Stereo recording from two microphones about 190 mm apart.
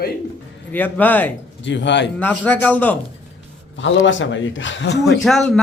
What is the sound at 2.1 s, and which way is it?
Speech, 10° left (ahead or behind).